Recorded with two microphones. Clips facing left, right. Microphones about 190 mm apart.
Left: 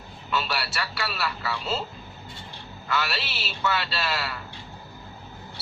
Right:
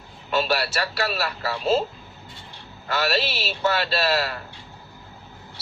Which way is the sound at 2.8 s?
40° right (ahead or behind).